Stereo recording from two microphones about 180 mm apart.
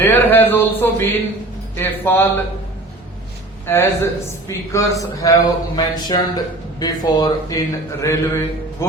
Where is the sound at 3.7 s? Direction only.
15° left (ahead or behind).